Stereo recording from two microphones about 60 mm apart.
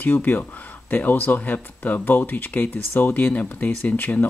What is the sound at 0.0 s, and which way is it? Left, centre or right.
Speech, left.